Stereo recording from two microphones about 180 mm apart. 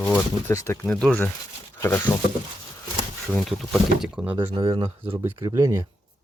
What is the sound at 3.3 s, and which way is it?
Speech, centre (ahead or behind).